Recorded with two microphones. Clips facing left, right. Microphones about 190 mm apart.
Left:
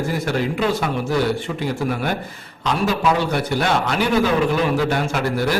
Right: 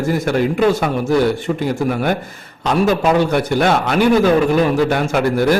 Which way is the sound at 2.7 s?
50° right (ahead or behind).